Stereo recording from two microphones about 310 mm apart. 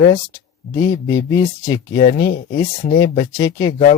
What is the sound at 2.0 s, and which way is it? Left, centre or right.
Speech, left.